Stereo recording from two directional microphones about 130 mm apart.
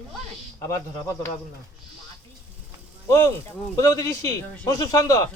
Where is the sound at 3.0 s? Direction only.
25° left (ahead or behind).